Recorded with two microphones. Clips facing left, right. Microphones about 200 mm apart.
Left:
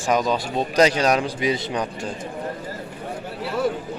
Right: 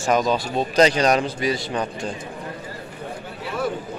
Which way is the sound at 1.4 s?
20° left (ahead or behind).